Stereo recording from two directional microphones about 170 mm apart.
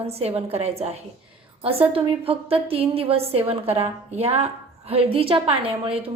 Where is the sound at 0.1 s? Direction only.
35° right (ahead or behind).